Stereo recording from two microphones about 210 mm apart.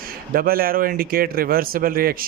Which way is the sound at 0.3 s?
45° right (ahead or behind).